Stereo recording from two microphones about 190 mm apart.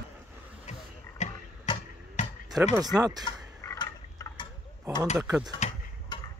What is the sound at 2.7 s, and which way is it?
Speech, 20° right (ahead or behind).